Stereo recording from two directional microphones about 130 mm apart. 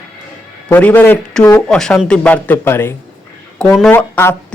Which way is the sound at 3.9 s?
20° left (ahead or behind).